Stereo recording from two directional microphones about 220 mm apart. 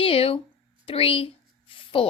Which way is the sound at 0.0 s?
25° left (ahead or behind).